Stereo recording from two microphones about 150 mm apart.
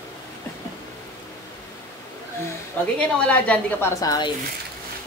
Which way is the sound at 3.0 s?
10° left (ahead or behind).